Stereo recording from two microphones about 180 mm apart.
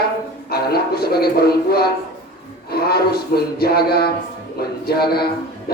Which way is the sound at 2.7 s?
60° left (ahead or behind).